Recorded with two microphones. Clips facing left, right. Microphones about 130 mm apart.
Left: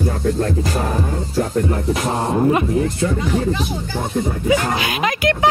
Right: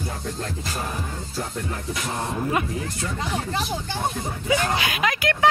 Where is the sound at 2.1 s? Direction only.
40° left (ahead or behind).